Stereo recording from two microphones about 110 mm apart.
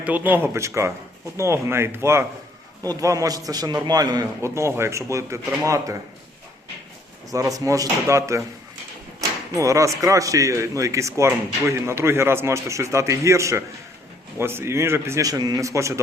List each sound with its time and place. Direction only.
0.0 s a man's voice: 15° right (ahead or behind); by 4.3 s 35° right (ahead or behind)
4.4 s speech: 25° right (ahead or behind)
7.3 s speech: 30° right (ahead or behind)
9.6 s speech: 30° right (ahead or behind)